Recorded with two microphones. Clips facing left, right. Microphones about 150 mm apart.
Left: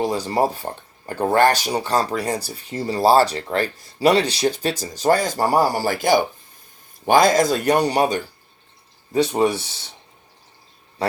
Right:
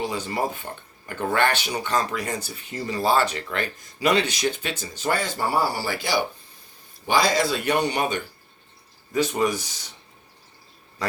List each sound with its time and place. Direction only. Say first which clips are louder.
0.0 s speech: left 6 dB; 35° left (ahead or behind)